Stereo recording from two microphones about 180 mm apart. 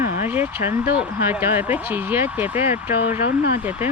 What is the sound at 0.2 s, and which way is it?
Speech, 10° right (ahead or behind).